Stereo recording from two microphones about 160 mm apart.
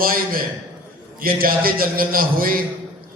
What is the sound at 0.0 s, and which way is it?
A man's voice, 65° right (ahead or behind).